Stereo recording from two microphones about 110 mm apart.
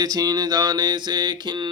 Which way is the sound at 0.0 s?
35° right (ahead or behind).